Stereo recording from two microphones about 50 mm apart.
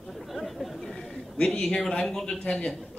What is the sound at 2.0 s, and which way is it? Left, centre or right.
Speech, centre.